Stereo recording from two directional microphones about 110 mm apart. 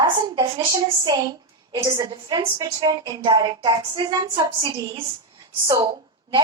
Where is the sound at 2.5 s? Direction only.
35° right (ahead or behind).